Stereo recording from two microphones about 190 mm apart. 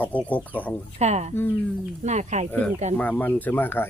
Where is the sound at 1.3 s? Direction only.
10° left (ahead or behind).